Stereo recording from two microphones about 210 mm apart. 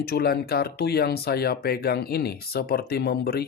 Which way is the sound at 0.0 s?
50° left (ahead or behind).